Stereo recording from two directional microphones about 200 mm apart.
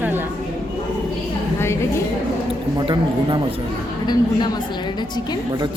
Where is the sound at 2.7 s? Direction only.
25° right (ahead or behind).